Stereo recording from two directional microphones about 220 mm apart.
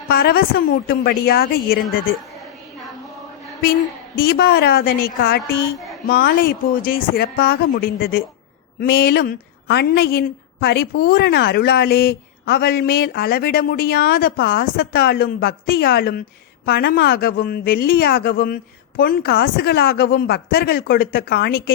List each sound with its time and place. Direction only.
0.1 s speech: 45° left (ahead or behind)
3.6 s speech: 45° left (ahead or behind)